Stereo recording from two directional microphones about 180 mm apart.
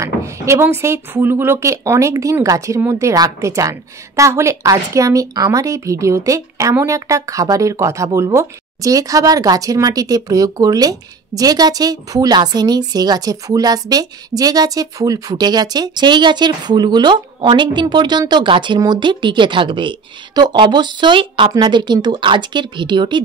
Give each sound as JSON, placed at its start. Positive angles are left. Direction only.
{"t": 0.0, "sound": "speech", "side_deg": -15}